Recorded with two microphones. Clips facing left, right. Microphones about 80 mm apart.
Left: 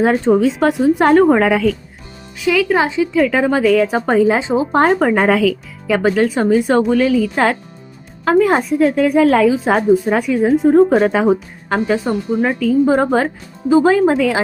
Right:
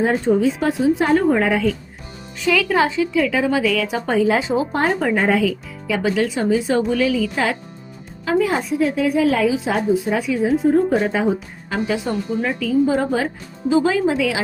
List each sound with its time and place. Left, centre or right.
0.0 s a woman's voice: left
2.4 s speech: centre
3.1 s a woman's voice: left
4.7 s a woman's voice: left
5.9 s a woman's voice: left
10.8 s a woman's voice: left
11.7 s a woman's voice: left